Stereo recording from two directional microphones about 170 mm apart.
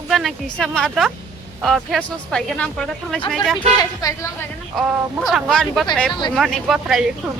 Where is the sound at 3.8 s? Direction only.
20° left (ahead or behind).